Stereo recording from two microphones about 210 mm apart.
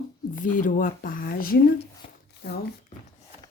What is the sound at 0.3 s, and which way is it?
Speech, 40° left (ahead or behind).